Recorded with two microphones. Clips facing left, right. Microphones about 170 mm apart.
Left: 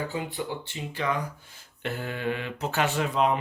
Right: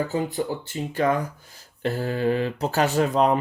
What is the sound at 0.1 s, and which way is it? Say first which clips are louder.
Speech: right 6 dB; 40° right (ahead or behind).